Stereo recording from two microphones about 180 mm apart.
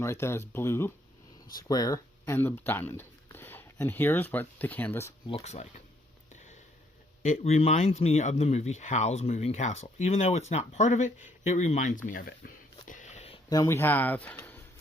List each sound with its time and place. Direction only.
0.0 s speech: 15° left (ahead or behind)
5.3 s speech: 35° left (ahead or behind)
7.2 s speech: 40° left (ahead or behind)
12.9 s a sound: 40° left (ahead or behind)
13.5 s speech: 15° left (ahead or behind)